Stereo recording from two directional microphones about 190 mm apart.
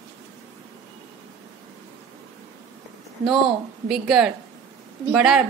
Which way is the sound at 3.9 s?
5° right (ahead or behind).